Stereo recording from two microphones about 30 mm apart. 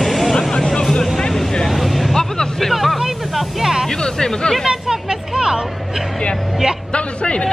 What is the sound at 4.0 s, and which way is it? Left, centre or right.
Hubbub, left.